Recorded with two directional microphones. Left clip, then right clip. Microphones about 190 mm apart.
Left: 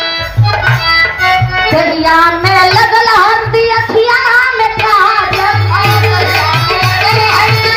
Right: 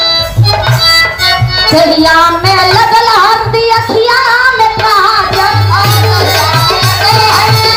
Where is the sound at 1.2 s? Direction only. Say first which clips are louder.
Right 1 dB; 20° left (ahead or behind).